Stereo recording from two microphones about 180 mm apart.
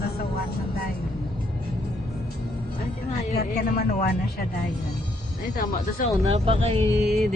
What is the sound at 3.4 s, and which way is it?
Speech, 55° left (ahead or behind).